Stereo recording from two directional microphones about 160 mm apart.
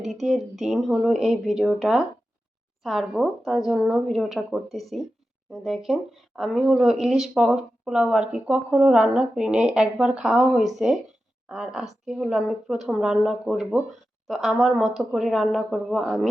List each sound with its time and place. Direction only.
0.0 s speech: centre (ahead or behind)